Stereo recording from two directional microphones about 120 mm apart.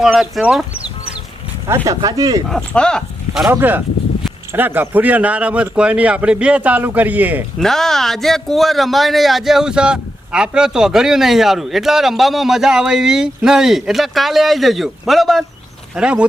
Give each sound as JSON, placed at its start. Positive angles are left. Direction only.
{"t": 0.0, "sound": "speech", "side_deg": -5}
{"t": 1.6, "sound": "speech", "side_deg": -25}
{"t": 2.5, "sound": "speech", "side_deg": 5}
{"t": 3.5, "sound": "speech", "side_deg": -15}
{"t": 7.6, "sound": "speech", "side_deg": 5}